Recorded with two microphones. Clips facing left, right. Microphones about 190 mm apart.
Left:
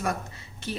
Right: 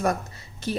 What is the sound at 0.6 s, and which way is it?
Speech, 40° right (ahead or behind).